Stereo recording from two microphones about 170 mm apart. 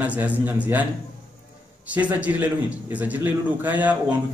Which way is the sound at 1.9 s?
10° right (ahead or behind).